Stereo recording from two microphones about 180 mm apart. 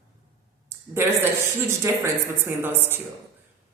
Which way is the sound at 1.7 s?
15° right (ahead or behind).